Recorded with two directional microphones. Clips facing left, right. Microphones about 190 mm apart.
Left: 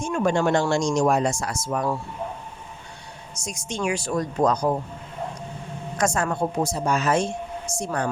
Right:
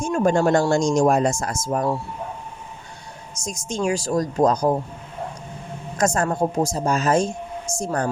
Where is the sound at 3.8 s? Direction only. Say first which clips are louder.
Right 3 dB; 35° right (ahead or behind).